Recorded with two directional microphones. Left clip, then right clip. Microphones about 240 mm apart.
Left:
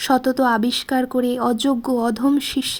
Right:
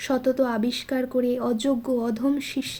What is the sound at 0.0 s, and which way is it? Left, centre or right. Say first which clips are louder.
Speech: left 5 dB; left.